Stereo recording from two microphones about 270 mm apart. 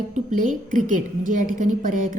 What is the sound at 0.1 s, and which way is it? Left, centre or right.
A woman's voice, right.